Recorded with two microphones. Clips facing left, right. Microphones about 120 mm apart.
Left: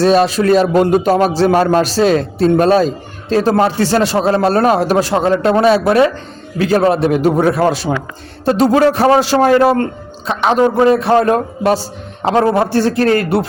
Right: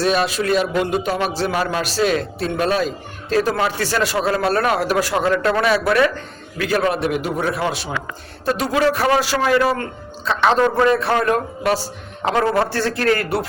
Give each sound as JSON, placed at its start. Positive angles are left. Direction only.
{"t": 0.0, "sound": "a man's voice", "side_deg": 35}
{"t": 7.3, "sound": "a man's voice", "side_deg": 45}
{"t": 10.2, "sound": "a man's voice", "side_deg": 15}
{"t": 11.1, "sound": "a man's voice", "side_deg": 30}